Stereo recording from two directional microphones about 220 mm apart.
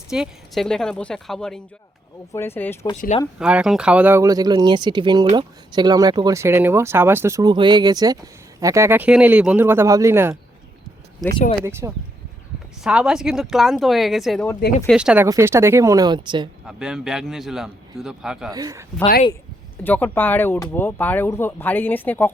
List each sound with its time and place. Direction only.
0.1 s a man's voice: centre (ahead or behind)
2.9 s speech: 30° left (ahead or behind)
3.3 s speech: 5° right (ahead or behind)
11.6 s a man's voice: 10° right (ahead or behind)
16.6 s a man's voice: 5° right (ahead or behind)
18.5 s speech: 15° right (ahead or behind)
19.8 s speech: 10° left (ahead or behind)